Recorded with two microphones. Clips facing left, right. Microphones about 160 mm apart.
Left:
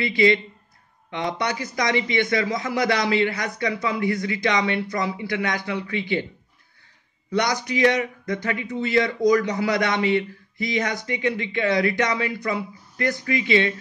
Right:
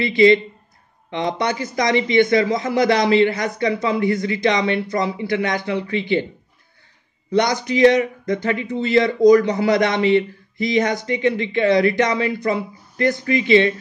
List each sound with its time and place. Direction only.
0.0 s speech: 25° right (ahead or behind)
7.3 s speech: 25° right (ahead or behind)